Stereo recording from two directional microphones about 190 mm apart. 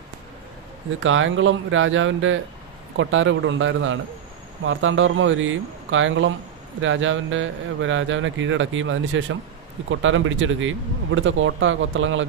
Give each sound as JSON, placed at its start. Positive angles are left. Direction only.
{"t": 0.9, "sound": "a man's voice", "side_deg": -90}